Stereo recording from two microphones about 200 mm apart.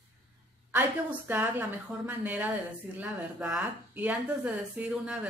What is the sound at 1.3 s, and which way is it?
Speech, 10° right (ahead or behind).